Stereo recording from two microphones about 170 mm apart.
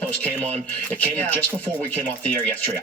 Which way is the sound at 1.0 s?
10° left (ahead or behind).